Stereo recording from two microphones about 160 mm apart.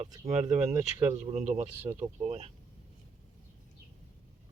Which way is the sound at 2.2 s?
40° right (ahead or behind).